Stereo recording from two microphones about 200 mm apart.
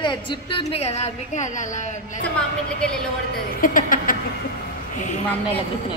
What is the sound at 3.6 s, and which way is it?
Speech, 45° left (ahead or behind).